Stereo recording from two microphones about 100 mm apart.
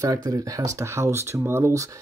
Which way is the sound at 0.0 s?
35° right (ahead or behind).